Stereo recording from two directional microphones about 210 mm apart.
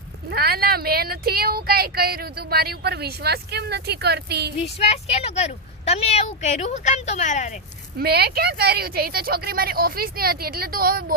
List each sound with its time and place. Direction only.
0.3 s speech: 50° right (ahead or behind)
4.6 s speech: 30° left (ahead or behind)
7.9 s speech: 50° right (ahead or behind)